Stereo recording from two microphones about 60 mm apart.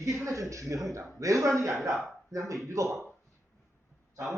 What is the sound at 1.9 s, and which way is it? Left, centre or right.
A woman's voice, right.